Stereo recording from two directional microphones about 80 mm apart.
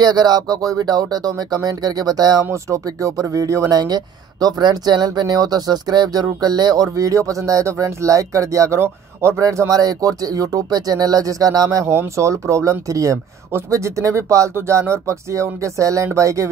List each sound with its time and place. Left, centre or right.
0.0 s speech: right
2.5 s speech: right
3.8 s speech: right
13.5 s speech: right